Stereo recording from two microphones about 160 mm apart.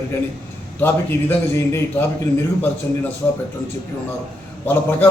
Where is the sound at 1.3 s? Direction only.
15° left (ahead or behind).